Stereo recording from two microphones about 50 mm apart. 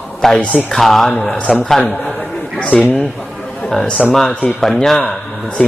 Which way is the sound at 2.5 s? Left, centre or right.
Left.